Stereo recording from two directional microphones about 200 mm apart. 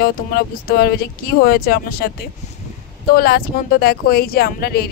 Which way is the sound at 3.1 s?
50° left (ahead or behind).